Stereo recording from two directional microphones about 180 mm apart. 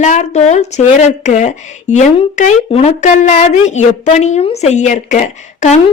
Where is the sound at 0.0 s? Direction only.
40° left (ahead or behind).